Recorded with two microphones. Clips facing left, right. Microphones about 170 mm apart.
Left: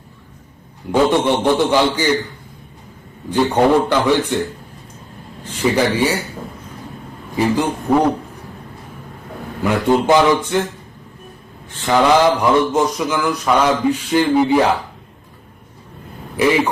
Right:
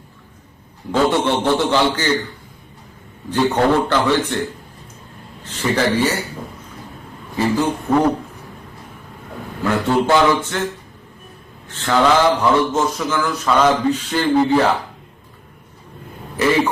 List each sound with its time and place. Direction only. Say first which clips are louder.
0.9 s a man's voice: left 2 dB; 15° left (ahead or behind)
3.2 s a man's voice: left 2 dB; 10° left (ahead or behind)
5.5 s a man's voice: left 2 dB; 10° left (ahead or behind)
7.3 s a man's voice: left 1 dB; 15° left (ahead or behind)
9.6 s a man's voice: left 2 dB; 15° left (ahead or behind)
11.7 s a man's voice: left 2 dB; 15° left (ahead or behind)